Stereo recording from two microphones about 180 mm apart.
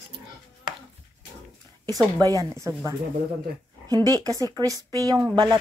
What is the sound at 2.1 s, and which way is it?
Speech, 20° right (ahead or behind).